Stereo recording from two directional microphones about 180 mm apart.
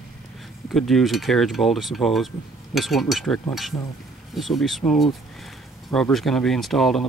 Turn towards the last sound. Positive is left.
turn(degrees=0)  # may be behind; listen again after turning